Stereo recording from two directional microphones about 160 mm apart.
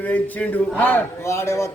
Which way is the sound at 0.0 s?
10° left (ahead or behind).